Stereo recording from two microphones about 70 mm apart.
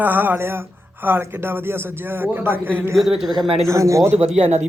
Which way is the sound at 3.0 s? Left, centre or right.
Centre.